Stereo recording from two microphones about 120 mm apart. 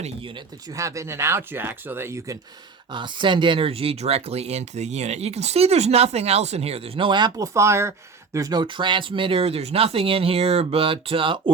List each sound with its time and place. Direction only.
0.8 s speech: 25° right (ahead or behind)
2.9 s speech: 40° right (ahead or behind)
8.6 s speech: 45° right (ahead or behind)